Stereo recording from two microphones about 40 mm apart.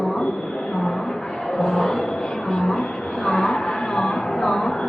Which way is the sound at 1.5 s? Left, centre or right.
Centre.